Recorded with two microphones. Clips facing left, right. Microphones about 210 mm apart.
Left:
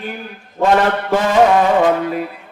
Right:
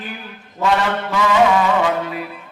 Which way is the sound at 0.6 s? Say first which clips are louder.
Left 4 dB; 50° left (ahead or behind).